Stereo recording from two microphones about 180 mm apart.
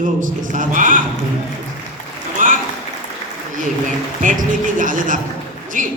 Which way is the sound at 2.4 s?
45° right (ahead or behind).